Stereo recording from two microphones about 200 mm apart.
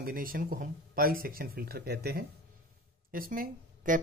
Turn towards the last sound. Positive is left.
turn(degrees=-45)  # may be behind; listen again after turning